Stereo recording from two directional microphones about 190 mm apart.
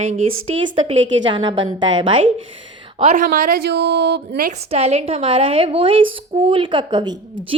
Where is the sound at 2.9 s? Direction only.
35° right (ahead or behind); by 4.5 s 60° right (ahead or behind).